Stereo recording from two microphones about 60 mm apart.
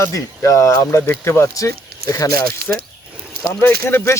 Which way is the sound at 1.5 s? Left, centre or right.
Left.